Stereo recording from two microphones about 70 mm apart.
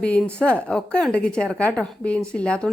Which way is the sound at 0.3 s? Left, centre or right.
Centre.